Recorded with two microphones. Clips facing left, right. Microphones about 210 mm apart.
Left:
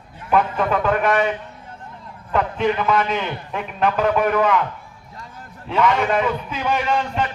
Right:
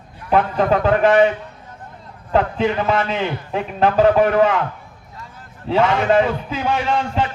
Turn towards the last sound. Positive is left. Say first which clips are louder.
# right 1 dB
turn(degrees=-30)  # may be behind; listen again after turning